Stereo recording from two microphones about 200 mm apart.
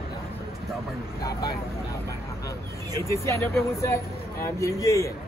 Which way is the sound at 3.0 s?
15° left (ahead or behind).